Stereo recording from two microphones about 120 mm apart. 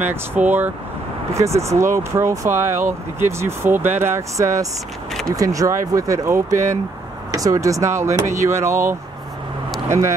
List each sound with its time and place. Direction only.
0.0 s speech: 15° right (ahead or behind)
1.3 s speech: 25° right (ahead or behind)